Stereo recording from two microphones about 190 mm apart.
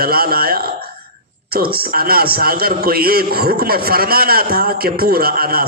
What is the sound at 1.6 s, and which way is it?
A man's voice, 50° right (ahead or behind).